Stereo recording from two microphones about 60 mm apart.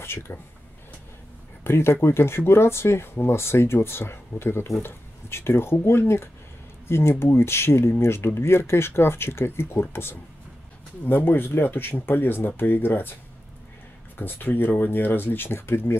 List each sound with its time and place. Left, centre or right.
0.0 s speech: left
1.6 s speech: left
14.1 s speech: left